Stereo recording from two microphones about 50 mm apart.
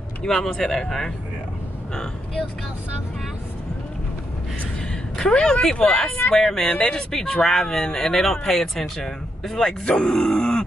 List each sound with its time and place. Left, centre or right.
0.2 s speech: centre
5.1 s speech: centre
6.3 s speech: centre
6.6 s speech: left
7.1 s speech: centre